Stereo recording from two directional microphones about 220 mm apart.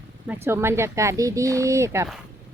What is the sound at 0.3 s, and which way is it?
Speech, 10° right (ahead or behind).